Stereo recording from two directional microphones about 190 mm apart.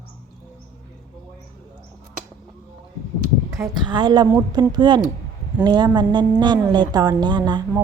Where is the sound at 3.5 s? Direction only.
20° right (ahead or behind).